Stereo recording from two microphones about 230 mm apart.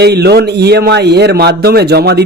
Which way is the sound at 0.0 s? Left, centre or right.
Right.